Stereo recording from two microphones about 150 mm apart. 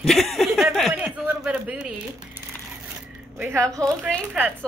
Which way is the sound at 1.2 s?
10° right (ahead or behind).